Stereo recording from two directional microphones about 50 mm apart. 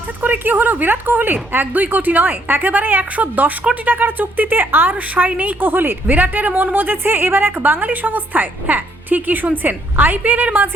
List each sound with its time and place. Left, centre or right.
0.2 s a woman's voice: right
6.1 s a woman's voice: right